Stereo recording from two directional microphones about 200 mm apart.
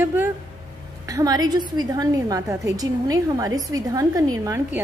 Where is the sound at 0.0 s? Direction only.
10° right (ahead or behind).